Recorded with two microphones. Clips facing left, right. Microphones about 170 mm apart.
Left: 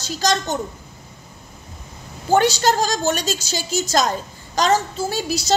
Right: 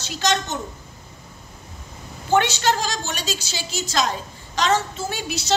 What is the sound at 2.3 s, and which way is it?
A woman's voice, 35° left (ahead or behind).